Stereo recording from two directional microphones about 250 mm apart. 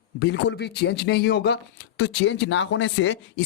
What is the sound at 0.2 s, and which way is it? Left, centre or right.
Speech, left.